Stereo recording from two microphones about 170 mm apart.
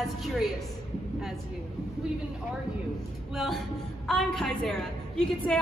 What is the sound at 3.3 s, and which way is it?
A woman's voice, centre (ahead or behind).